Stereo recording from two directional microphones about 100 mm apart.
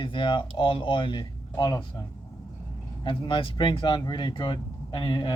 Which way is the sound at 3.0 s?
55° left (ahead or behind).